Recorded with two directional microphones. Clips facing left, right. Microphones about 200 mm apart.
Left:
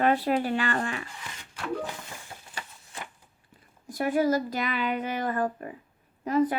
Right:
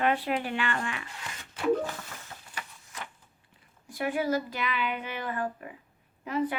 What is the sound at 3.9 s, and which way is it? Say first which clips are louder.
Speech: left 4 dB; 40° left (ahead or behind).